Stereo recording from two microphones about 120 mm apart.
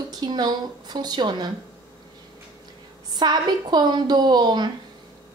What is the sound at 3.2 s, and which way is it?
A woman's voice, 35° right (ahead or behind).